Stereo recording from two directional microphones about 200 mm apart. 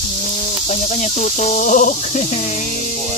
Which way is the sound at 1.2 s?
35° left (ahead or behind).